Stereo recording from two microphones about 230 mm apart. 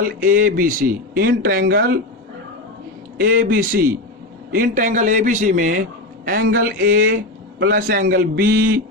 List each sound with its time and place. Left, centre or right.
0.0 s speech: right
3.2 s speech: right